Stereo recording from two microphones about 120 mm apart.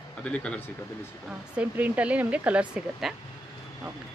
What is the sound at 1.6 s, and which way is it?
Speech, 10° right (ahead or behind).